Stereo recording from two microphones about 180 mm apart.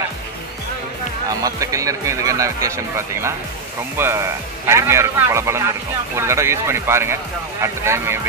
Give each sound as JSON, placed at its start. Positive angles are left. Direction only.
{"t": 1.4, "sound": "speech", "side_deg": -20}
{"t": 4.0, "sound": "speech", "side_deg": -15}